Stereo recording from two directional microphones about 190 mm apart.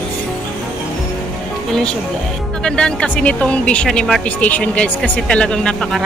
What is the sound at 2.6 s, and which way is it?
Speech, 5° left (ahead or behind).